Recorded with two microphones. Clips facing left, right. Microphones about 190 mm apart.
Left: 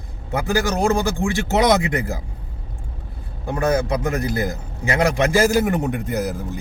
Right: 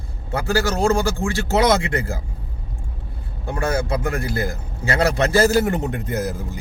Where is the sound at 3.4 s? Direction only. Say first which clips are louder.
Left 3 dB; 20° left (ahead or behind).